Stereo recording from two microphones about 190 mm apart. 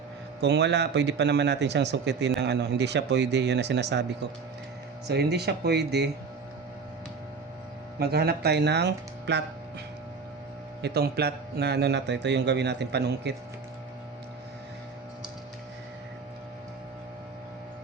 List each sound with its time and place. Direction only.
0.4 s a man's voice: 65° right (ahead or behind)
5.0 s a man's voice: 60° right (ahead or behind)
7.9 s a man's voice: 55° right (ahead or behind)
10.8 s a man's voice: 55° right (ahead or behind)